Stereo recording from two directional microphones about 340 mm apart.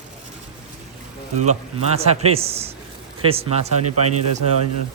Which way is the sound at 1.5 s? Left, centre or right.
Centre.